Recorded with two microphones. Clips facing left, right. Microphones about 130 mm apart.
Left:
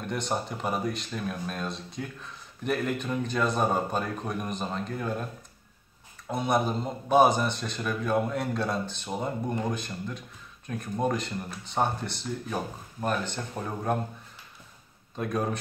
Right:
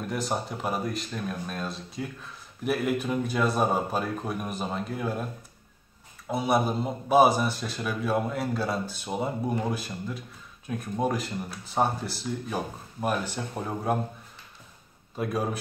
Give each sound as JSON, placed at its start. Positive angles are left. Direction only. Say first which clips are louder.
{"t": 0.0, "sound": "speech", "louder": "right 1 dB", "side_deg": 0}
{"t": 6.2, "sound": "speech", "louder": "right 1 dB", "side_deg": -5}
{"t": 15.1, "sound": "speech", "louder": "even", "side_deg": -5}